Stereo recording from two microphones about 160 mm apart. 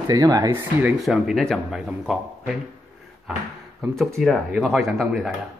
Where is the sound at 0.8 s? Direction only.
Centre (ahead or behind).